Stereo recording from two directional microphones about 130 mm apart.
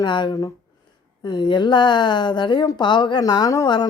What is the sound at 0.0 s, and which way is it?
Speech, 35° left (ahead or behind).